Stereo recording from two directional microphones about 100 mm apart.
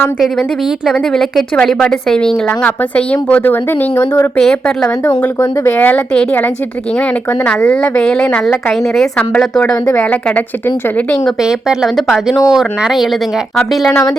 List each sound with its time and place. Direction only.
0.9 s a woman's voice: centre (ahead or behind); by 4.3 s 25° left (ahead or behind)
4.4 s a woman's voice: 5° left (ahead or behind)
5.0 s a woman's voice: 25° left (ahead or behind)
7.7 s a woman's voice: 10° left (ahead or behind)
11.3 s speech: 5° right (ahead or behind)